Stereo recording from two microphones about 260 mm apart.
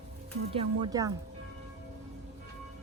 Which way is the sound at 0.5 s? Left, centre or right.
Centre.